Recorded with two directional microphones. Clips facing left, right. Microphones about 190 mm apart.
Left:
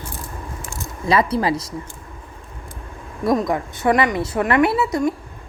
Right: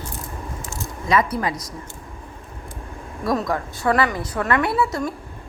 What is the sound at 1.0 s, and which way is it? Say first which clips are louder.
Speech: left 3 dB; 30° left (ahead or behind).